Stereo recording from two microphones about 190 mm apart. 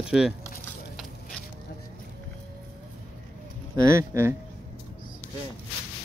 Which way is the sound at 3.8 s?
15° right (ahead or behind).